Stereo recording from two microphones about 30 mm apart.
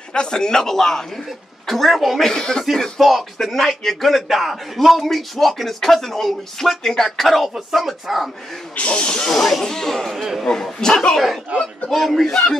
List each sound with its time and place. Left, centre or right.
0.1 s speech: left
1.7 s a man's voice: centre
2.3 s speech: left
3.0 s a man's voice: centre
8.7 s speech: left
9.0 s speech: left
9.3 s speech: centre
10.1 s a man's voice: centre
10.4 s speech: centre
11.9 s a man's voice: centre
12.3 s speech: left